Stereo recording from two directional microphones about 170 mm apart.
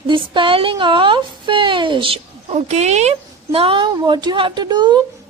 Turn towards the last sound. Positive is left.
turn(degrees=-25)  # may be behind; listen again after turning